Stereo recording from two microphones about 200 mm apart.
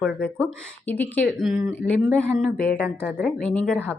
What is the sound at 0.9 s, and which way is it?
Speech, 10° left (ahead or behind).